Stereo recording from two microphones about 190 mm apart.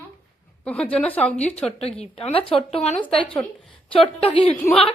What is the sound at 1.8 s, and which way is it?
A woman's voice, 30° left (ahead or behind).